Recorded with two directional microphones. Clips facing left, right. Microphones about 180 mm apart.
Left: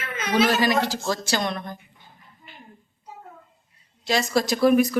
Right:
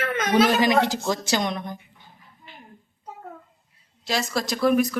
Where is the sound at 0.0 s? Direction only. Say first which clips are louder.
Right 3 dB; 55° right (ahead or behind).